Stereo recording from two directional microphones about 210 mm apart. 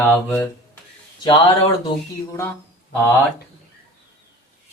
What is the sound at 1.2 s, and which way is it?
Speech, 20° left (ahead or behind).